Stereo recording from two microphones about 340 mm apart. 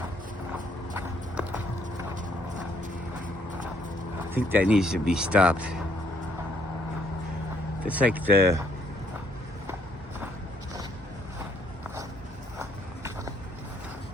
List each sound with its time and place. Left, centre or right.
0.9 s clip-clop: centre
4.3 s speech: centre
7.9 s speech: centre
12.5 s horse: centre